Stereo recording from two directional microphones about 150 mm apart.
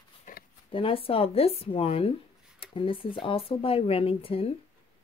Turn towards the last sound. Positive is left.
turn(degrees=40)  # may be behind; listen again after turning